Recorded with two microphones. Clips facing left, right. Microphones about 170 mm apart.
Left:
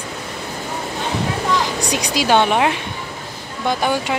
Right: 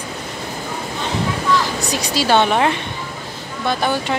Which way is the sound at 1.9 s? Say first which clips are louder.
Even; 15° left (ahead or behind).